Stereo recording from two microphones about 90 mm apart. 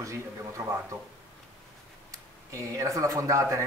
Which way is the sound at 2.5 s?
35° right (ahead or behind).